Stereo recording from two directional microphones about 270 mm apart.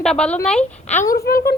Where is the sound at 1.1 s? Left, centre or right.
Left.